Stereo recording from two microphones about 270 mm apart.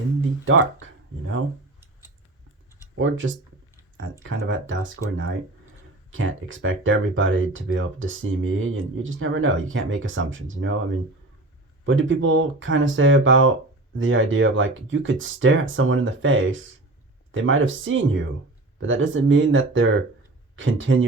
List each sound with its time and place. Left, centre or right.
0.4 s speech: right
3.0 s speech: right
11.9 s speech: right